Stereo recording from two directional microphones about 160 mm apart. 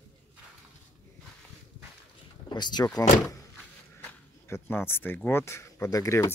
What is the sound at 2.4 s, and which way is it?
Speech, 25° left (ahead or behind).